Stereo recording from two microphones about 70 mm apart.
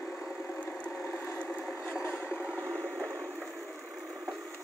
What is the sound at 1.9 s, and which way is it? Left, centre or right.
Vehicle, centre.